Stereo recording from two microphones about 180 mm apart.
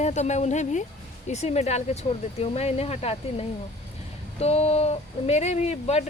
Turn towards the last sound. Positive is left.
turn(degrees=35)  # may be behind; listen again after turning